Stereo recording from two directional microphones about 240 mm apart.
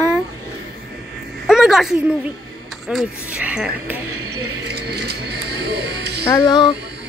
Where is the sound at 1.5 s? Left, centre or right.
Centre.